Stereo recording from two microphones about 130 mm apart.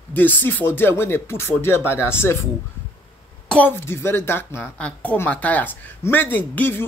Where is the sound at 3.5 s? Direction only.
15° left (ahead or behind).